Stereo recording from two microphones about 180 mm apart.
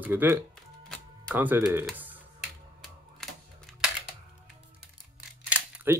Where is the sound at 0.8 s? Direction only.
5° left (ahead or behind).